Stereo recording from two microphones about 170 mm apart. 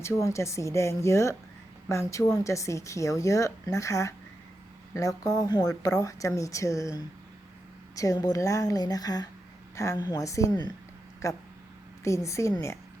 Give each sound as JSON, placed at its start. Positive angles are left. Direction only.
{"t": 0.0, "sound": "a woman's voice", "side_deg": 15}
{"t": 7.9, "sound": "a woman's voice", "side_deg": 20}